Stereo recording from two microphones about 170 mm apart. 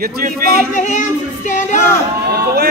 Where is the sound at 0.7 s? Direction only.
50° left (ahead or behind).